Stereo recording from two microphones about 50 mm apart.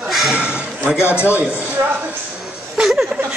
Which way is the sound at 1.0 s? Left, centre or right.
Left.